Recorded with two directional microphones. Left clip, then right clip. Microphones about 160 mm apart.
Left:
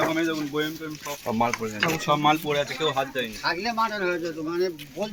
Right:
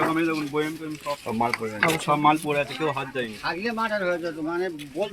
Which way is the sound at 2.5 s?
35° right (ahead or behind).